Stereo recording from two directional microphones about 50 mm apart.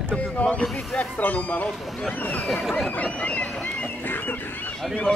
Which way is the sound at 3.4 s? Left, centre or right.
Centre.